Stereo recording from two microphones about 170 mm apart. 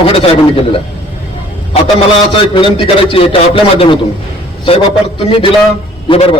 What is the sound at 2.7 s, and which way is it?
Speech, 35° left (ahead or behind).